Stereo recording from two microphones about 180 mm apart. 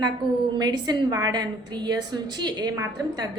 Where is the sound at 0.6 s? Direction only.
20° right (ahead or behind).